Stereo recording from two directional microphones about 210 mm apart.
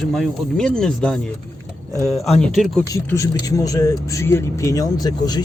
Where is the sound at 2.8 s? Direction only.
15° left (ahead or behind).